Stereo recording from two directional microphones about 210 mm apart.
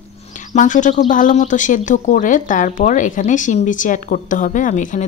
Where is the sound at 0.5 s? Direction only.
35° left (ahead or behind).